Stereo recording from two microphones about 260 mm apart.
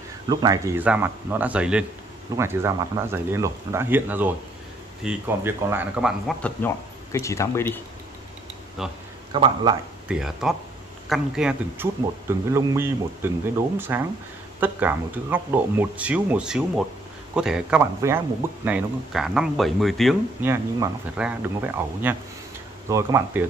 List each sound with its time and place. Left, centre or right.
0.3 s speech: centre
9.3 s speech: centre
10.0 s speech: centre